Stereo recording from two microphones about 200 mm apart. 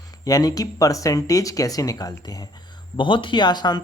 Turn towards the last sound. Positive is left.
turn(degrees=20)  # may be behind; listen again after turning